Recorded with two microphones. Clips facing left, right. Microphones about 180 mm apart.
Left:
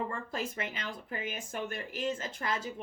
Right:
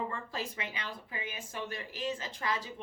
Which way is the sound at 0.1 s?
45° left (ahead or behind).